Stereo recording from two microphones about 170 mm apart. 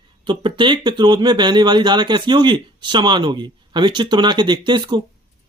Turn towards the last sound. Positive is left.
turn(degrees=-25)  # may be behind; listen again after turning